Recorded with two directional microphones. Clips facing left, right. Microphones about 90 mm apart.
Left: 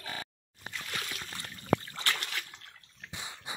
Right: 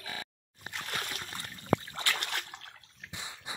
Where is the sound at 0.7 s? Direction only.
45° right (ahead or behind).